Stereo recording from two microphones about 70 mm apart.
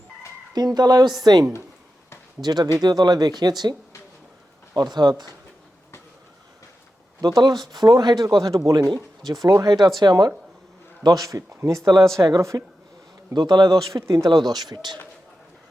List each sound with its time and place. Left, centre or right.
0.5 s speech: right
2.8 s speech: right
4.7 s speech: right
7.2 s speech: right
8.4 s speech: right
8.7 s speech: right
9.2 s speech: right
9.6 s speech: right
11.0 s speech: right
12.2 s a woman's voice: right
12.5 s speech: right
13.3 s speech: right
13.9 s speech: right
14.3 s speech: right